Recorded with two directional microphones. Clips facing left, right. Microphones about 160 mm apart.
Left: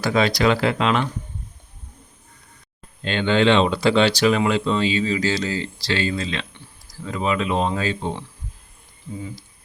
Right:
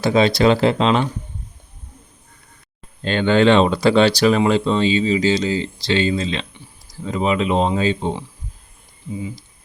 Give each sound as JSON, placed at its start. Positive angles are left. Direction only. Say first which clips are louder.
{"t": 0.0, "sound": "speech", "louder": "right 4 dB", "side_deg": -25}
{"t": 3.0, "sound": "speech", "louder": "right 4 dB", "side_deg": -45}